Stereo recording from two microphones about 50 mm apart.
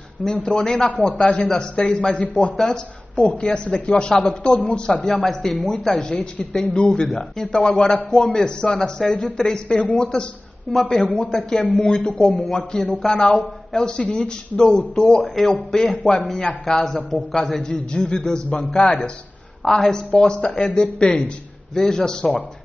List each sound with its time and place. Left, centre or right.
0.2 s speech: centre
15.2 s speech: centre